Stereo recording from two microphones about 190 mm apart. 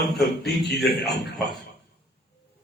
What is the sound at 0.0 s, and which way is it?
A man's voice, centre (ahead or behind).